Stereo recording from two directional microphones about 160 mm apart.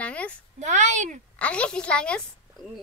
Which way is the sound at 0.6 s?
50° right (ahead or behind).